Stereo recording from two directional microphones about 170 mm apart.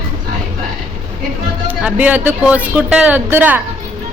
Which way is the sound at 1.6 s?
10° right (ahead or behind).